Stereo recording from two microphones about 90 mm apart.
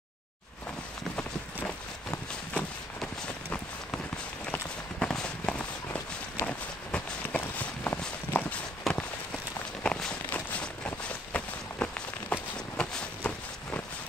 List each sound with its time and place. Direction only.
2.5 s run: 15° left (ahead or behind)
4.5 s clip-clop: 10° left (ahead or behind)
8.3 s walk: 15° left (ahead or behind)
8.9 s walk: centre (ahead or behind)
10.3 s a sound: 15° left (ahead or behind)